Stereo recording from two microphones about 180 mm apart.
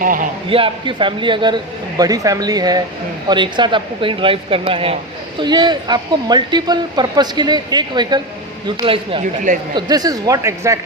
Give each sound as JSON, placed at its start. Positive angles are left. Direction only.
{"t": 0.0, "sound": "speech", "side_deg": -50}
{"t": 0.5, "sound": "speech", "side_deg": -30}
{"t": 9.2, "sound": "speech", "side_deg": -45}
{"t": 9.7, "sound": "speech", "side_deg": -20}